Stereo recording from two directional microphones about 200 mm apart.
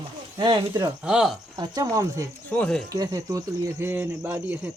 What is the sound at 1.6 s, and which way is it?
Speech, 20° right (ahead or behind).